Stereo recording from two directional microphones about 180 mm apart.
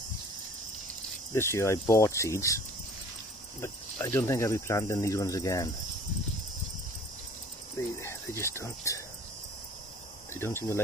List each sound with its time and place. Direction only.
1.3 s cricket: 15° left (ahead or behind)
3.6 s cricket: 15° left (ahead or behind)
8.0 s speech: 15° left (ahead or behind)
10.3 s cricket: 15° left (ahead or behind)